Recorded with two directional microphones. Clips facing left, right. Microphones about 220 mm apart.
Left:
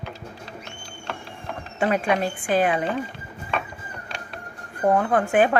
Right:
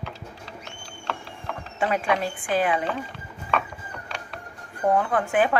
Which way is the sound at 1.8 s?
50° left (ahead or behind).